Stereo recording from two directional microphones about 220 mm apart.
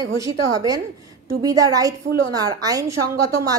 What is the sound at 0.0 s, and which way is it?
A woman's voice, 15° right (ahead or behind).